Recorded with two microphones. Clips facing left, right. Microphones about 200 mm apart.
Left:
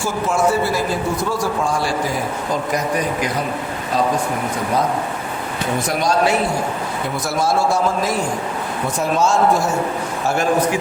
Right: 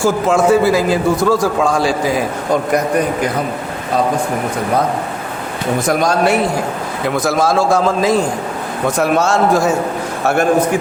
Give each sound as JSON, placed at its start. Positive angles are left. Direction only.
{"t": 0.0, "sound": "a man's voice", "side_deg": -90}
{"t": 6.0, "sound": "a man's voice", "side_deg": -50}
{"t": 7.1, "sound": "a man's voice", "side_deg": -90}
{"t": 9.0, "sound": "a man's voice", "side_deg": -70}